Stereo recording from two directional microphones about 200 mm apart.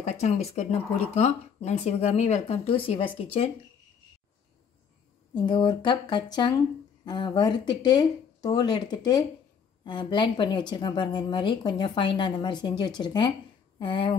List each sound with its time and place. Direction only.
0.0 s speech: 35° left (ahead or behind)
5.3 s speech: 20° left (ahead or behind)